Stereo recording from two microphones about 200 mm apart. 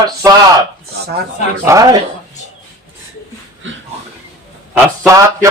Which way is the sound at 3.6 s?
70° right (ahead or behind).